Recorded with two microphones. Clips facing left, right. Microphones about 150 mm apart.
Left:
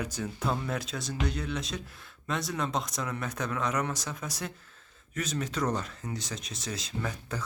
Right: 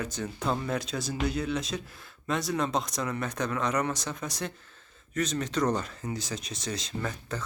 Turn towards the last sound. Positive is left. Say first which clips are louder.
# right 1 dB
turn(degrees=10)  # may be behind; listen again after turning